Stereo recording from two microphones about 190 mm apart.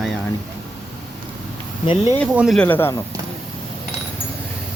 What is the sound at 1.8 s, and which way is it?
Speech, 25° left (ahead or behind).